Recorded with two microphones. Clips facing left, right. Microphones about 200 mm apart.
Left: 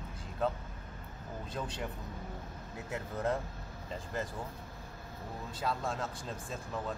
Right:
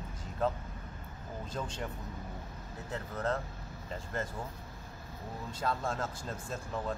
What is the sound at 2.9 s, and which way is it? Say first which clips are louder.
Speech: even; 10° left (ahead or behind).